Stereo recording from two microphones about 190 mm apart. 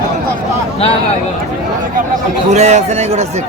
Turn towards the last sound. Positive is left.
turn(degrees=-35)  # may be behind; listen again after turning